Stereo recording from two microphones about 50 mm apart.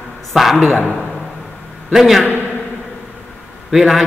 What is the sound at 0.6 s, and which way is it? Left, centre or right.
Speech, right.